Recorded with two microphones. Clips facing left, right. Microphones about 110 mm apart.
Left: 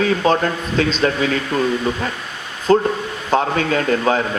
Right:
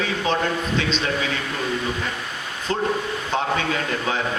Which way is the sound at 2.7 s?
50° left (ahead or behind).